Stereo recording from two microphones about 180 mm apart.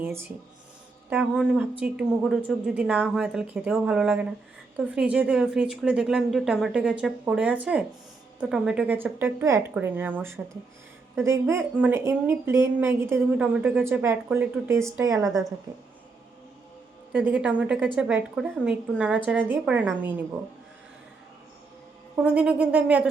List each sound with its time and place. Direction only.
0.0 s a woman's voice: 10° right (ahead or behind)
17.1 s speech: 10° right (ahead or behind)
22.1 s a woman's voice: 5° right (ahead or behind)